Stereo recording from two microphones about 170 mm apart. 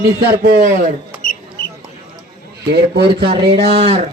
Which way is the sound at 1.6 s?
65° left (ahead or behind).